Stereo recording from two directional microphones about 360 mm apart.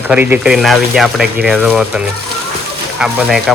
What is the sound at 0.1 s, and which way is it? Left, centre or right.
Speech, centre.